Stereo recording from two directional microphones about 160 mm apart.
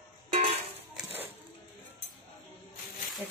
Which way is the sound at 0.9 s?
10° right (ahead or behind).